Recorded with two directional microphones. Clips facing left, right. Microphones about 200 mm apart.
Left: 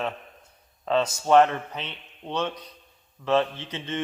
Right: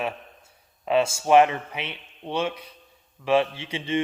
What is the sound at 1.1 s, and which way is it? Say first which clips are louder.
A man's voice: even; 10° right (ahead or behind).